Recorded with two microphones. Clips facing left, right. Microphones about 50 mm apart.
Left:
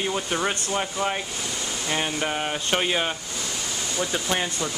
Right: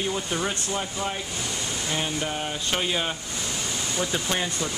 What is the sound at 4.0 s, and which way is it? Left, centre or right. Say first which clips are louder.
Speech: left 2 dB; centre.